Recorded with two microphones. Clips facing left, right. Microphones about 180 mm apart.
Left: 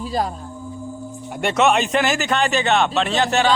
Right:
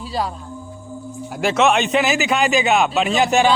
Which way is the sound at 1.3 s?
Centre (ahead or behind).